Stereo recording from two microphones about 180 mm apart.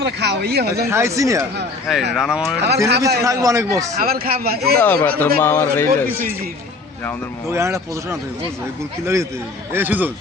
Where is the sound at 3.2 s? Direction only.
15° right (ahead or behind).